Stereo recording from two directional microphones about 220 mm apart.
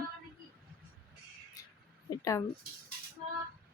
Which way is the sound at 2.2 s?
15° left (ahead or behind).